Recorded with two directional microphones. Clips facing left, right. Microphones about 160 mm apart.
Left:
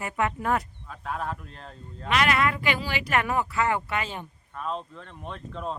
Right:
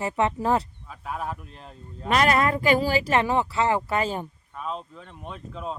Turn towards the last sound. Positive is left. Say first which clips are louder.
# even
turn(degrees=-5)  # may be behind; listen again after turning